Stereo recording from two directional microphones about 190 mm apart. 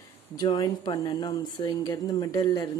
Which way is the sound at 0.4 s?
20° left (ahead or behind).